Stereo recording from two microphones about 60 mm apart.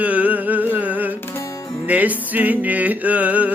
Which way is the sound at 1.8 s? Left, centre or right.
Right.